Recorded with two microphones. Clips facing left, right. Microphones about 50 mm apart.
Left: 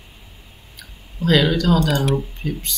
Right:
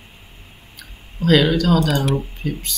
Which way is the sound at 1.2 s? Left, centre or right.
Centre.